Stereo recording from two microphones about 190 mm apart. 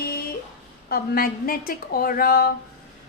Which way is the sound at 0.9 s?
50° left (ahead or behind).